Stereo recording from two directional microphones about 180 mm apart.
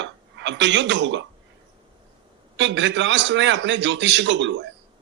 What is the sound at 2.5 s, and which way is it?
A man's voice, 90° right.